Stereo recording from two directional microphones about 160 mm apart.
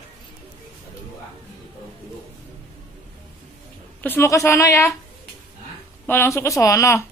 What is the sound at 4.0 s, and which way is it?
Speech, 15° left (ahead or behind).